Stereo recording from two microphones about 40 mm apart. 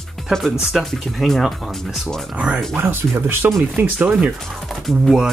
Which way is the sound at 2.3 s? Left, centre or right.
Right.